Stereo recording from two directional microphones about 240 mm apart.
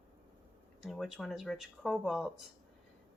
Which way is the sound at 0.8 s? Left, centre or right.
Centre.